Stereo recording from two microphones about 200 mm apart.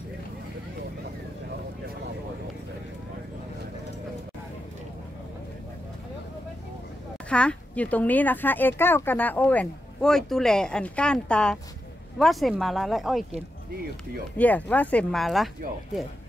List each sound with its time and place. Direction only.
7.2 s speech: 5° left (ahead or behind)
14.3 s speech: 5° left (ahead or behind)